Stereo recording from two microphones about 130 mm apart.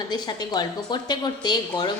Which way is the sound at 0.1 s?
30° left (ahead or behind).